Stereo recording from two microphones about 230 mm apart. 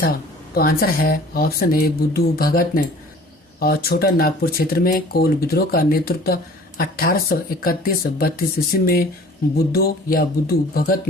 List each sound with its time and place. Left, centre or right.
0.5 s speech: left